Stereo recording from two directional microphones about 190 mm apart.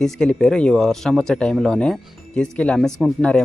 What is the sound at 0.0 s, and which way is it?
Speech, 5° left (ahead or behind).